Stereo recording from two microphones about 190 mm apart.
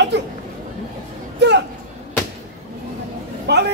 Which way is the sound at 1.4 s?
65° right (ahead or behind).